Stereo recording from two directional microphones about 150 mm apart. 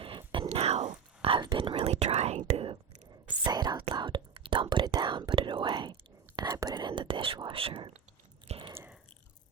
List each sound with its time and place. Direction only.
0.0 s whispering: 35° right (ahead or behind)
3.4 s whispering: 30° right (ahead or behind)
8.4 s a sound: 40° right (ahead or behind)